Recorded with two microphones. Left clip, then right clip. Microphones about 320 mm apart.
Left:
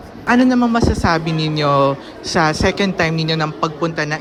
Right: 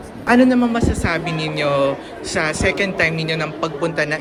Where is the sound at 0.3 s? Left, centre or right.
Centre.